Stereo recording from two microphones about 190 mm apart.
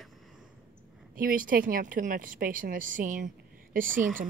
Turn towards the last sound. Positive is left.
turn(degrees=-45)  # may be behind; listen again after turning